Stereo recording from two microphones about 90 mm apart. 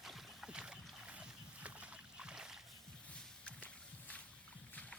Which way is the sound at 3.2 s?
15° left (ahead or behind).